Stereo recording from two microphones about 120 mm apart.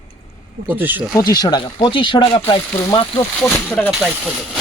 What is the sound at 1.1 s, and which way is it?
Speech, 35° left (ahead or behind).